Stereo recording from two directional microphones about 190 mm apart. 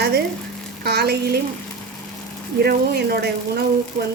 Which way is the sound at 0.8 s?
60° right (ahead or behind).